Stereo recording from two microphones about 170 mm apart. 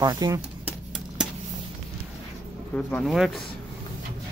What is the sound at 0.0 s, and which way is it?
Speech, 20° right (ahead or behind).